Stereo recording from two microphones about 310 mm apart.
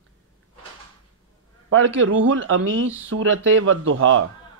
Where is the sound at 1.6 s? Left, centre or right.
Right.